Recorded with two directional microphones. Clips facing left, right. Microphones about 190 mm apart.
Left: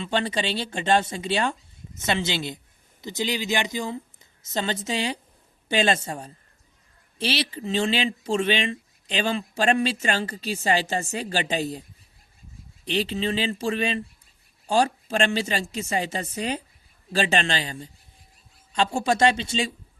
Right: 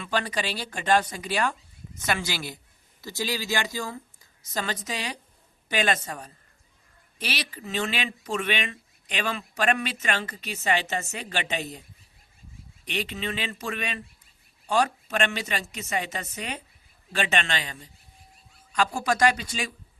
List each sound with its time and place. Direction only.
0.0 s a man's voice: 25° left (ahead or behind)